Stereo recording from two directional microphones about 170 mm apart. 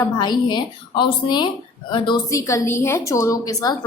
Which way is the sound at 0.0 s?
25° left (ahead or behind).